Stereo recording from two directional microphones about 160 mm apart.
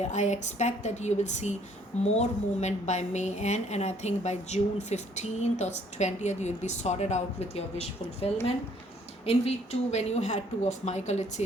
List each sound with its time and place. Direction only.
0.0 s a woman's voice: 45° left (ahead or behind)